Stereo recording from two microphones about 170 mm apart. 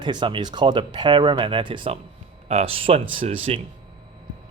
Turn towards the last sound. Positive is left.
turn(degrees=-35)  # may be behind; listen again after turning